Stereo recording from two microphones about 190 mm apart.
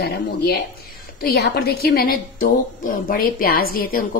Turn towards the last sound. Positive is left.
turn(degrees=50)  # may be behind; listen again after turning